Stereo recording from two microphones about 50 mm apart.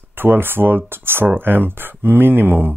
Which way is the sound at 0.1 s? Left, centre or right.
Right.